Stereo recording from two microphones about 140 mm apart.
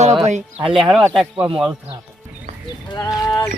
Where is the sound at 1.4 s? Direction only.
35° right (ahead or behind).